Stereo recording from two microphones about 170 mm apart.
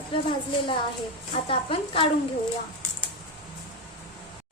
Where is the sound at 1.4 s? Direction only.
30° left (ahead or behind).